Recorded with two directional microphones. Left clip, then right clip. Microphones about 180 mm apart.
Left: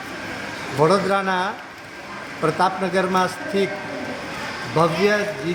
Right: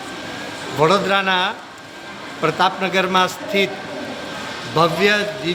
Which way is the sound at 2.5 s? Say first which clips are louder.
Right 3 dB; 30° left (ahead or behind).